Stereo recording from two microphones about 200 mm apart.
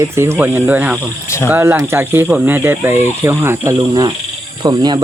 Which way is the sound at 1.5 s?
10° right (ahead or behind).